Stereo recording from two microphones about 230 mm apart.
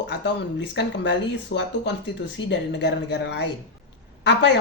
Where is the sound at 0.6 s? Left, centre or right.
Left.